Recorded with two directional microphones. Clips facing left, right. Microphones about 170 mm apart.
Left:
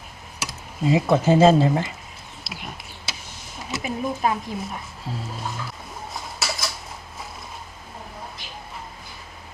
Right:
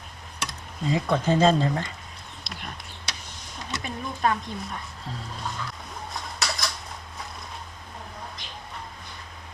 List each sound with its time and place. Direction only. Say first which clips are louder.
0.3 s speech: left 3 dB; 5° left (ahead or behind)
2.4 s a sound: left 2 dB; 5° left (ahead or behind)
3.6 s speech: left 6 dB; 5° left (ahead or behind)
6.1 s cutlery: left 1 dB; 5° left (ahead or behind)